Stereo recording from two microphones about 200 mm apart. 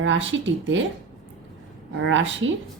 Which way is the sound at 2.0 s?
70° right (ahead or behind).